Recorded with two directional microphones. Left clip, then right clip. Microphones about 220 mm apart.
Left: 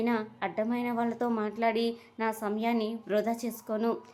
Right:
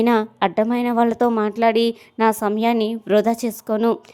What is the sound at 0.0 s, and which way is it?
A woman's voice, 45° right (ahead or behind).